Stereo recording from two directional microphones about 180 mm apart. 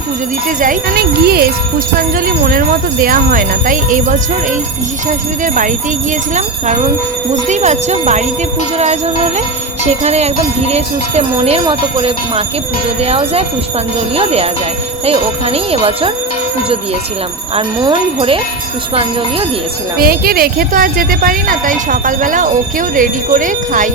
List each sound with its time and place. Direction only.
0.6 s speech: 55° right (ahead or behind)
6.3 s jingle bell: 40° right (ahead or behind)
9.8 s jingle bell: 40° right (ahead or behind)
17.7 s speech: 25° right (ahead or behind)
20.0 s speech: 55° right (ahead or behind)